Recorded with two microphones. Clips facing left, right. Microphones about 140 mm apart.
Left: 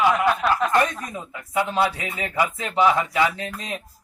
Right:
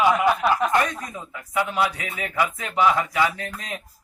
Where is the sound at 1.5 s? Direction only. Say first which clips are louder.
Left 2 dB; 25° left (ahead or behind).